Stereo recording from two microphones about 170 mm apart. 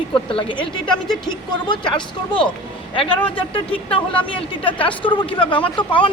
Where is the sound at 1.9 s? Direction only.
30° left (ahead or behind).